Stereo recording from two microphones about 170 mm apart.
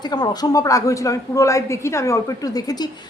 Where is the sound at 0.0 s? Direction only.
25° left (ahead or behind).